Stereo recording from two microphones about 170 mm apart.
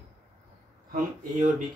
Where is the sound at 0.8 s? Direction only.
55° right (ahead or behind).